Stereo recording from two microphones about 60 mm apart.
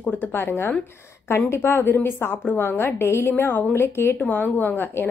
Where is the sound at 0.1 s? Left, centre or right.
Left.